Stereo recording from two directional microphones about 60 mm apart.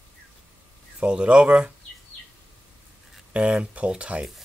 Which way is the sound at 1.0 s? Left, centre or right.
Centre.